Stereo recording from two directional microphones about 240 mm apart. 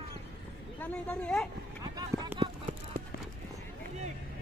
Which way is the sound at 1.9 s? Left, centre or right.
Centre.